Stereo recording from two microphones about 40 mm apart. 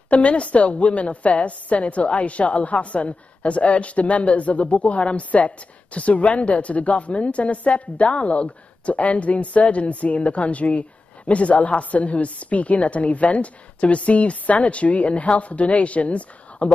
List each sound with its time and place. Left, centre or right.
0.1 s a woman's voice: left